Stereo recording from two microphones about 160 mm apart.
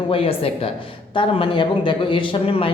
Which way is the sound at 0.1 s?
35° left (ahead or behind).